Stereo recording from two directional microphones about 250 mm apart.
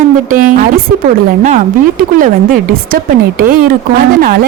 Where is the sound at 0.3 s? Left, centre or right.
Right.